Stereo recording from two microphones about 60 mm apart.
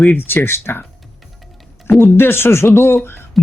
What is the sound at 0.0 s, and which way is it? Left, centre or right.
Speech, left.